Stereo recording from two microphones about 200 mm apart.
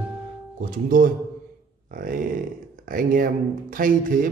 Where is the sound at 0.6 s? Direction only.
45° right (ahead or behind).